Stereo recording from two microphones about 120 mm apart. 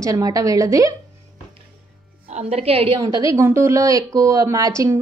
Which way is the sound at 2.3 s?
65° right (ahead or behind).